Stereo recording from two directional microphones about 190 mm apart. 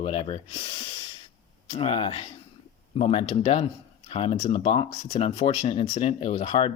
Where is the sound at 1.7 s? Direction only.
30° left (ahead or behind).